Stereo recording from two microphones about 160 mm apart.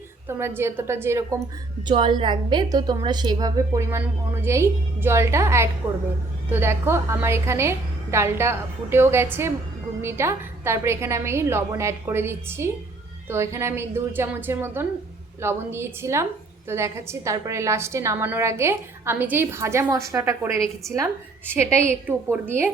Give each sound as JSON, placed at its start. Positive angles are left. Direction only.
{"t": 0.3, "sound": "a woman's voice", "side_deg": -15}
{"t": 1.9, "sound": "a woman's voice", "side_deg": -30}